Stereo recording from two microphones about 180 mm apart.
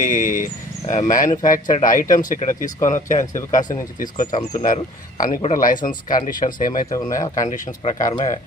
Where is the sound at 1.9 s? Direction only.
45° left (ahead or behind).